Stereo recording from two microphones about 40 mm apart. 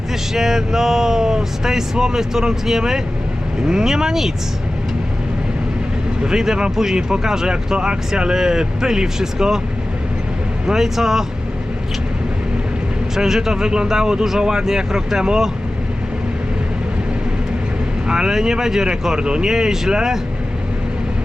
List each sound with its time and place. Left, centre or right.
0.3 s speech: centre
6.2 s speech: centre
10.7 s speech: centre
13.1 s speech: centre
18.1 s speech: centre